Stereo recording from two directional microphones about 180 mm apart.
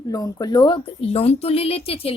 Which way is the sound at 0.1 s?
20° left (ahead or behind).